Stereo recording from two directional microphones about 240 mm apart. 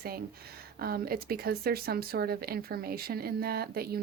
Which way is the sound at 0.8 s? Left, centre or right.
Right.